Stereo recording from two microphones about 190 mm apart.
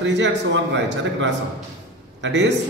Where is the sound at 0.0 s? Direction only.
70° right (ahead or behind).